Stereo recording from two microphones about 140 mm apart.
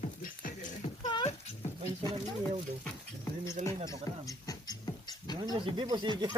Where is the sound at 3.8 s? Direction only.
25° left (ahead or behind).